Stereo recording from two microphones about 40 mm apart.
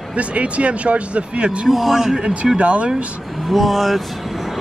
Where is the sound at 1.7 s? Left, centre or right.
Centre.